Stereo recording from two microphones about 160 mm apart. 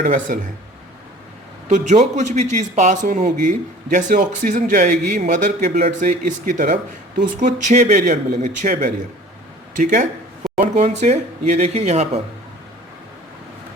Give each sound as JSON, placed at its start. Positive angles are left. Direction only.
{"t": 0.0, "sound": "speech", "side_deg": -55}
{"t": 1.7, "sound": "speech", "side_deg": -45}
{"t": 10.4, "sound": "a sound", "side_deg": 0}
{"t": 10.8, "sound": "speech", "side_deg": -45}